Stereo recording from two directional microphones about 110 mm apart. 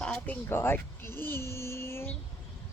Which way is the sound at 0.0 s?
10° left (ahead or behind).